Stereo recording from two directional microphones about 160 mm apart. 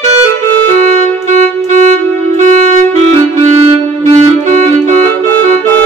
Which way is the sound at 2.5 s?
50° right (ahead or behind).